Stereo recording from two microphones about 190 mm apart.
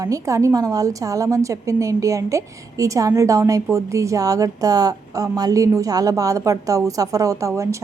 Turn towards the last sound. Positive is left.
turn(degrees=-15)  # may be behind; listen again after turning